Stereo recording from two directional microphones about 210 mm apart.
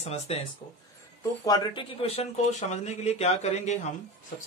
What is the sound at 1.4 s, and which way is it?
A man's voice, 20° left (ahead or behind).